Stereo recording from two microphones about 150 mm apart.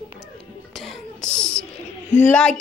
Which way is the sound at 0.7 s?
Centre (ahead or behind).